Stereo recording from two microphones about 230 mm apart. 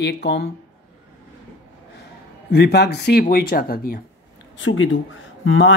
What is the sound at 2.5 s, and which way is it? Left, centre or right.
Speech, left.